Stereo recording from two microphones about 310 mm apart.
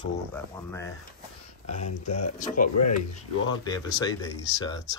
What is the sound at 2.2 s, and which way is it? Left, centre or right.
Speech, left.